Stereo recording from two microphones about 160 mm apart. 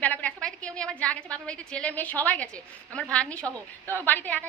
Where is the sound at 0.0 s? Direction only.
10° left (ahead or behind).